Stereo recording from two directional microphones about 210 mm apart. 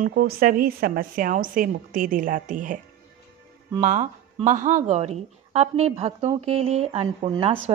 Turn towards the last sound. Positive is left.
turn(degrees=-25)  # may be behind; listen again after turning